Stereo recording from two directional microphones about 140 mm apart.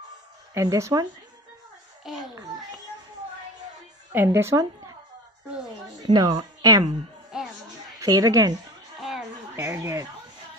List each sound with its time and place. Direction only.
0.6 s speech: 20° right (ahead or behind)
2.0 s a sound: centre (ahead or behind)
4.1 s speech: 15° right (ahead or behind)
6.0 s a woman's voice: 30° right (ahead or behind)
7.3 s music: 5° right (ahead or behind)
8.0 s speech: 25° right (ahead or behind)
9.6 s speech: 20° right (ahead or behind)